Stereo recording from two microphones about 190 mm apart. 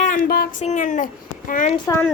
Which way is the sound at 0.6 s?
40° left (ahead or behind).